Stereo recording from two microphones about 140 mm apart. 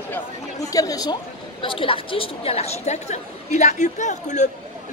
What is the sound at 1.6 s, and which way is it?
A woman's voice, 40° left (ahead or behind).